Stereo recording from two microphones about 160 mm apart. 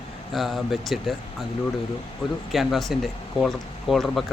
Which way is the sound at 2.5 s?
Centre (ahead or behind).